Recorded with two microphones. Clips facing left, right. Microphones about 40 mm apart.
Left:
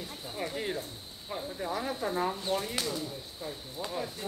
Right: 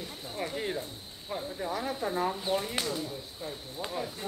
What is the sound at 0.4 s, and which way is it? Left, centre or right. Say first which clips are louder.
Speech: right 1 dB; centre.